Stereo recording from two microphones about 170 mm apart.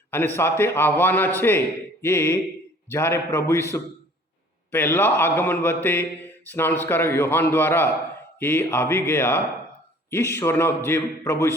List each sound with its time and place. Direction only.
0.1 s speech: 15° left (ahead or behind)